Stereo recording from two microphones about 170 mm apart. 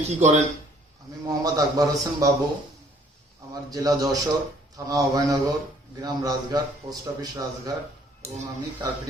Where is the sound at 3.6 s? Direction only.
20° right (ahead or behind).